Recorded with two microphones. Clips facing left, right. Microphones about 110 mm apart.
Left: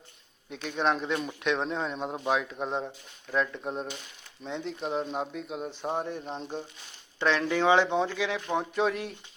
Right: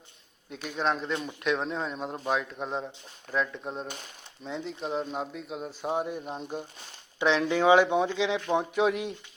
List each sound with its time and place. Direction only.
0.5 s speech: centre (ahead or behind)